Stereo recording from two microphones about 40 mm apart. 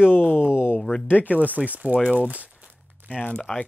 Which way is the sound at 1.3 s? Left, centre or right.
Right.